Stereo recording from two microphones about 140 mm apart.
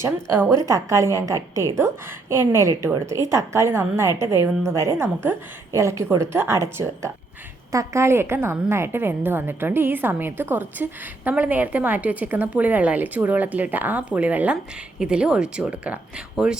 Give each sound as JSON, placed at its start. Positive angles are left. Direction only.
{"t": 0.0, "sound": "a woman's voice", "side_deg": -15}